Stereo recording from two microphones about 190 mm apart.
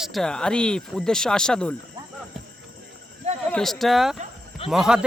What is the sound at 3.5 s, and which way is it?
Speech, centre (ahead or behind).